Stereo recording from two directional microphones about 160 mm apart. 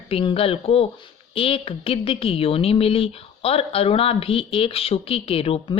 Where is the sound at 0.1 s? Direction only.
35° left (ahead or behind).